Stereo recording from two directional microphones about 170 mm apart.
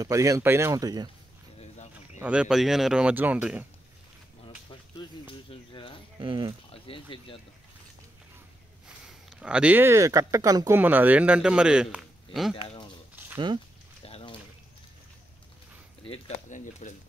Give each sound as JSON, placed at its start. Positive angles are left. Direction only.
{"t": 0.0, "sound": "speech", "side_deg": -20}
{"t": 2.1, "sound": "speech", "side_deg": -5}
{"t": 4.9, "sound": "speech", "side_deg": 30}
{"t": 6.1, "sound": "speech", "side_deg": -30}
{"t": 6.7, "sound": "speech", "side_deg": 30}
{"t": 8.8, "sound": "a man's voice", "side_deg": -5}
{"t": 12.5, "sound": "a sound", "side_deg": 30}
{"t": 14.0, "sound": "a sound", "side_deg": 35}
{"t": 16.4, "sound": "speech", "side_deg": 50}